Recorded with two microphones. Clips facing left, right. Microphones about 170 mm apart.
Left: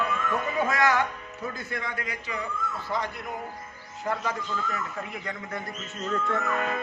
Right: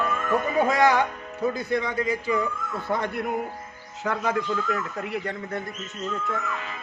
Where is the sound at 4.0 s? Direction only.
80° right.